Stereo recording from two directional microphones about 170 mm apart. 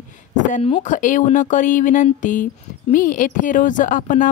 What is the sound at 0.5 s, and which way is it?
Speech, 35° left (ahead or behind).